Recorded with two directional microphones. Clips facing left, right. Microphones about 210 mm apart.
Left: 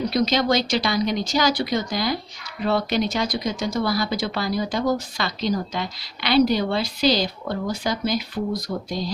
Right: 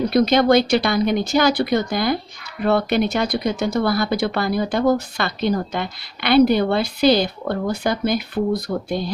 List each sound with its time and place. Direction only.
0.0 s speech: 55° right (ahead or behind)